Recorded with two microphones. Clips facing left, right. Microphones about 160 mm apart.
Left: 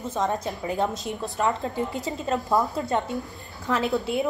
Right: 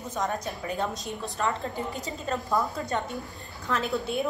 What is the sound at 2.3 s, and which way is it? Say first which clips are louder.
A woman's voice: left 4 dB; 20° left (ahead or behind).